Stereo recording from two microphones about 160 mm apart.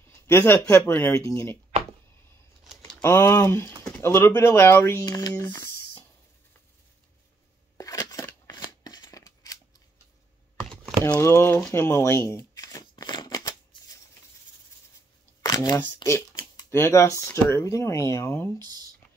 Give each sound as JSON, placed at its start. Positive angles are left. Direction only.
{"t": 0.0, "sound": "speech", "side_deg": 15}
{"t": 3.0, "sound": "speech", "side_deg": 15}
{"t": 7.7, "sound": "scissors", "side_deg": 20}
{"t": 10.6, "sound": "computer keyboard", "side_deg": 0}
{"t": 11.1, "sound": "shuffling cards", "side_deg": 15}
{"t": 15.4, "sound": "speech", "side_deg": 25}